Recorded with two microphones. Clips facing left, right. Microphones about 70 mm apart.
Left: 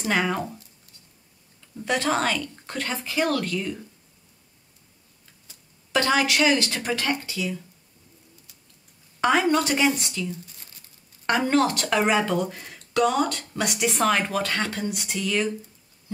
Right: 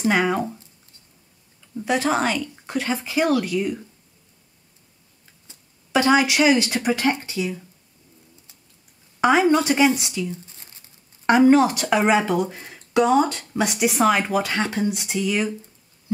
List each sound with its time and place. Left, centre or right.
0.1 s speech: centre
1.8 s speech: centre
5.9 s speech: centre
9.2 s a woman's voice: centre
11.2 s speech: centre